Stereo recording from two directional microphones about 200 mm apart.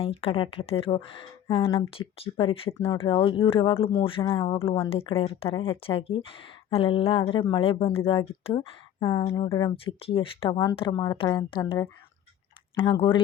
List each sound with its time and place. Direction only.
0.0 s speech: 30° left (ahead or behind)